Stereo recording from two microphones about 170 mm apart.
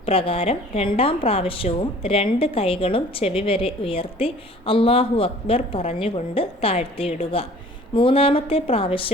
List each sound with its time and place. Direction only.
0.0 s a woman's voice: 35° left (ahead or behind)